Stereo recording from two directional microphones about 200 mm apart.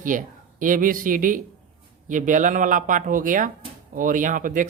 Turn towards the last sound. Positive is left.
turn(degrees=-40)  # may be behind; listen again after turning